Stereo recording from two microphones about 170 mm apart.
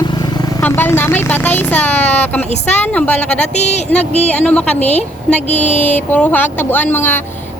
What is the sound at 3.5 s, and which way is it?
Speech, 40° left (ahead or behind).